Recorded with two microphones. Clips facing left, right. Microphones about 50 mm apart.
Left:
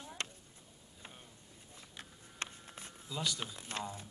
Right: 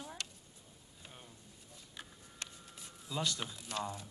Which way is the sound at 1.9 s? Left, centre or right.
Left.